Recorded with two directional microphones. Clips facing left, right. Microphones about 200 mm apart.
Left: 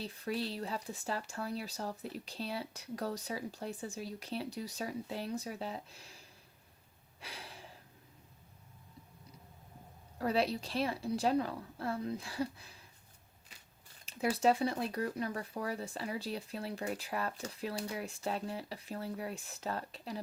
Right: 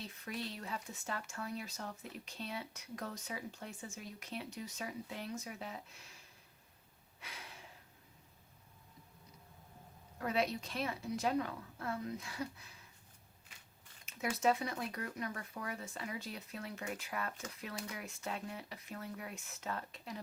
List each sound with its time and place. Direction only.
0.0 s speech: 30° left (ahead or behind)
7.2 s a sound: 30° left (ahead or behind)
10.2 s speech: 35° left (ahead or behind)
14.0 s speech: 30° left (ahead or behind)